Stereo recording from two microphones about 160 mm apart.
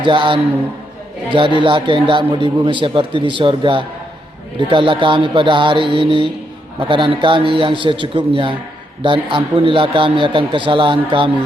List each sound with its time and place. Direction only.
0.0 s a man's voice: 30° right (ahead or behind)